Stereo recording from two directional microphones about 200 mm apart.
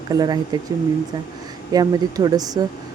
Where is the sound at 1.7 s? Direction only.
20° right (ahead or behind).